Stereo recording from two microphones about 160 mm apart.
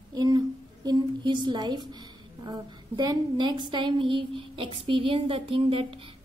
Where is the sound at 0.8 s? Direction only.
30° right (ahead or behind).